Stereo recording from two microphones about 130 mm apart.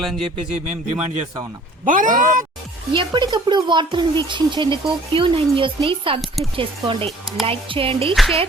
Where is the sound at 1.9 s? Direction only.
90° right.